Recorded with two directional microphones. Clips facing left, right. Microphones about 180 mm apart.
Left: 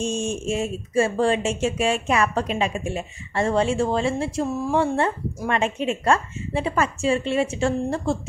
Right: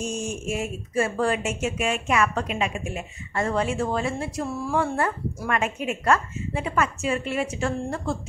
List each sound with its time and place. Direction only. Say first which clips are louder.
0.0 s speech: left 4 dB; 25° left (ahead or behind)